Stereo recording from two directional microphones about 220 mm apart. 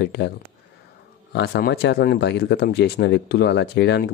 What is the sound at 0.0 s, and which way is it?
Speech, 50° left (ahead or behind).